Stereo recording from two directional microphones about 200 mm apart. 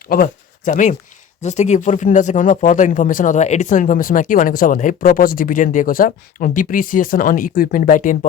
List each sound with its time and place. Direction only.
0.1 s speech: 45° left (ahead or behind)